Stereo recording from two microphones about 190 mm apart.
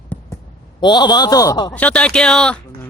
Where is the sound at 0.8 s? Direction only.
25° left (ahead or behind).